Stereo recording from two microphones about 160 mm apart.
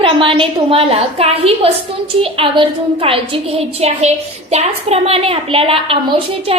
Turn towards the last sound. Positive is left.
turn(degrees=-35)  # may be behind; listen again after turning